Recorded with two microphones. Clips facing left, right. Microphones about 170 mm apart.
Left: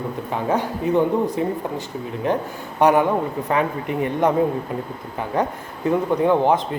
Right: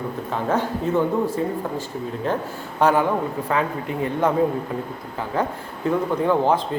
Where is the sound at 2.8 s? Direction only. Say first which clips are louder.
Left 2 dB; 20° left (ahead or behind).